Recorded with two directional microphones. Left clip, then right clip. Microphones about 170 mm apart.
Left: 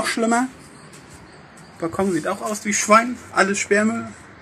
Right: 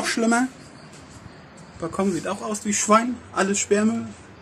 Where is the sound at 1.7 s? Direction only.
5° left (ahead or behind).